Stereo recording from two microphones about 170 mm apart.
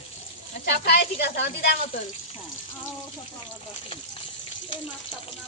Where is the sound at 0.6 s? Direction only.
75° left (ahead or behind).